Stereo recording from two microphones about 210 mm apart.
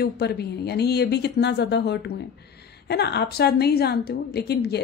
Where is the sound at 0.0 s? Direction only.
50° left (ahead or behind).